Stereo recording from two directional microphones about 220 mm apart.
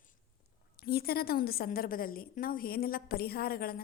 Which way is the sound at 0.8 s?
45° left (ahead or behind).